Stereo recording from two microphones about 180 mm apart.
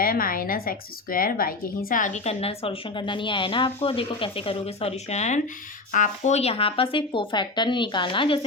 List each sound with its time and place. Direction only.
0.0 s a woman's voice: 55° left (ahead or behind); by 8.4 s 30° left (ahead or behind)